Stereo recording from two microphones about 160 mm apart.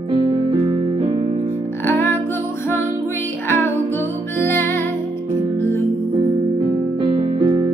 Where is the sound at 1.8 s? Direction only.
15° left (ahead or behind).